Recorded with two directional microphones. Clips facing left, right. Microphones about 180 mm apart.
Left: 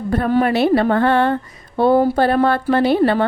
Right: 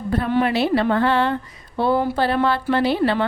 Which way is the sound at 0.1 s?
45° left (ahead or behind).